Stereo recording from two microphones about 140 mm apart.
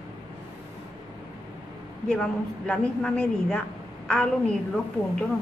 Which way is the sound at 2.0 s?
5° left (ahead or behind).